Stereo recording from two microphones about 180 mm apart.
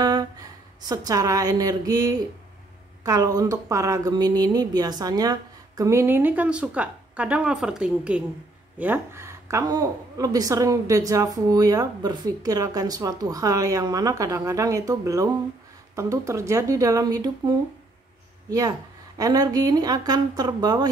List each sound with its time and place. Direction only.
0.0 s a woman's voice: 20° right (ahead or behind)